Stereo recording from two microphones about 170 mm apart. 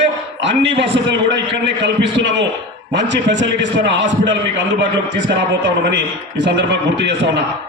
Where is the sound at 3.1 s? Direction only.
90° right.